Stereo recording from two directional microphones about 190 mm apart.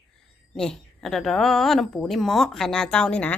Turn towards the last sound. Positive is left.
turn(degrees=5)  # may be behind; listen again after turning